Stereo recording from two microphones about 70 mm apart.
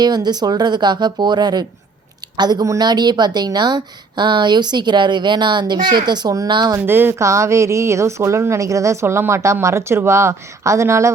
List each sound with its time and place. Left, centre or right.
0.0 s speech: right
6.8 s speech: right
7.2 s a woman's voice: right